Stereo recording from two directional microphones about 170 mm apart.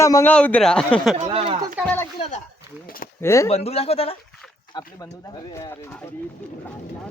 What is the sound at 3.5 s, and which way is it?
Speech, 35° left (ahead or behind).